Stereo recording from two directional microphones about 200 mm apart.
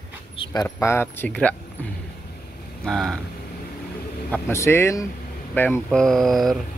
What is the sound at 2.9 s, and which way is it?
Speech, centre (ahead or behind).